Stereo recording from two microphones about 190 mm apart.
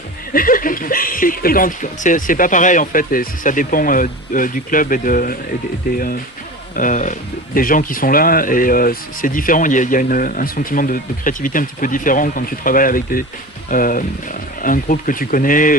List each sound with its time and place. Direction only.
0.3 s speech: 45° left (ahead or behind)
6.7 s speech: 40° left (ahead or behind)